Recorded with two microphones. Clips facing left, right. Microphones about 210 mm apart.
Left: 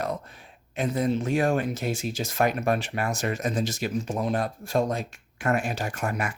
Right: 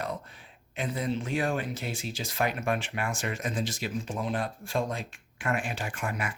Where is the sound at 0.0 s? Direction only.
45° left (ahead or behind).